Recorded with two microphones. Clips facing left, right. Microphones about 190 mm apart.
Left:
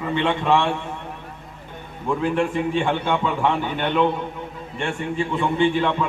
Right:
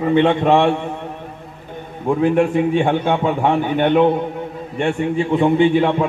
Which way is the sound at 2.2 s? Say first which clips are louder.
Right 7 dB; 55° right (ahead or behind).